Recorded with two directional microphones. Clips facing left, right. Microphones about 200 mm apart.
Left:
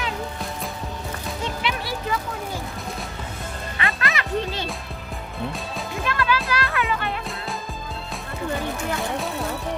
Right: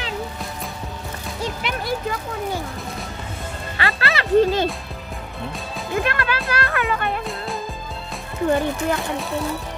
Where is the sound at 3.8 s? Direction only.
30° right (ahead or behind).